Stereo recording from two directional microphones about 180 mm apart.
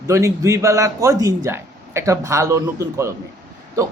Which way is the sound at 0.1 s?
15° right (ahead or behind).